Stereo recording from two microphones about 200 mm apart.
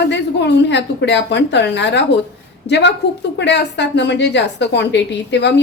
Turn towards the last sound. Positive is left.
turn(degrees=60)  # may be behind; listen again after turning